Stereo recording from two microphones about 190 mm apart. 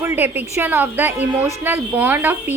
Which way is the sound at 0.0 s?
10° right (ahead or behind).